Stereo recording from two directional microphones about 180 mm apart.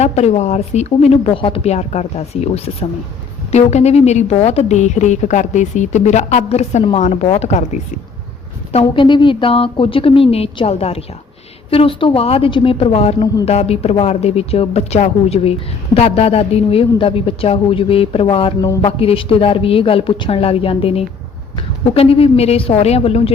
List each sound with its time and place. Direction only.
0.0 s a woman's voice: 40° left (ahead or behind)